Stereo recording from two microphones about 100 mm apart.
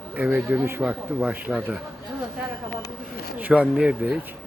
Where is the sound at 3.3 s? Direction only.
15° right (ahead or behind).